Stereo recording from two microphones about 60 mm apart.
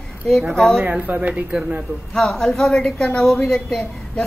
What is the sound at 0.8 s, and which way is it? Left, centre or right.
Speech, right.